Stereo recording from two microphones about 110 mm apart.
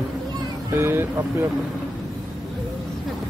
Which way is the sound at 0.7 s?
20° right (ahead or behind).